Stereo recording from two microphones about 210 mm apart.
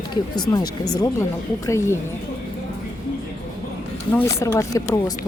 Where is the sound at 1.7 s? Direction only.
15° left (ahead or behind).